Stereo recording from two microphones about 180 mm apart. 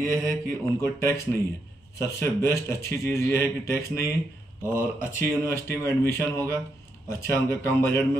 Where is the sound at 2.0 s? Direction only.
15° left (ahead or behind).